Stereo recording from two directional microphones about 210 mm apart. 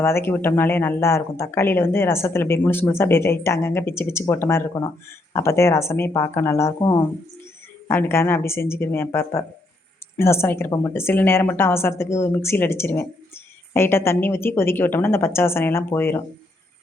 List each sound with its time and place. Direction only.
0.0 s a woman's voice: 10° left (ahead or behind)